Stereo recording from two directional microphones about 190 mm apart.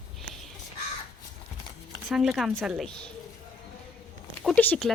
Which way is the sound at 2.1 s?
Centre (ahead or behind).